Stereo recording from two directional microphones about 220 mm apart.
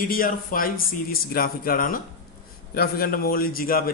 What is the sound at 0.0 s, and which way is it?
A man's voice, 40° left (ahead or behind).